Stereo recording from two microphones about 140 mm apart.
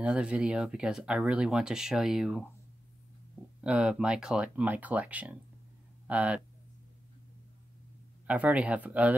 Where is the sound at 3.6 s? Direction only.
5° right (ahead or behind).